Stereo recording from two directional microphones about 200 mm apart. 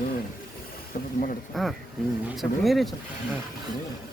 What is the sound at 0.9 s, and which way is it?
Speech, 40° left (ahead or behind).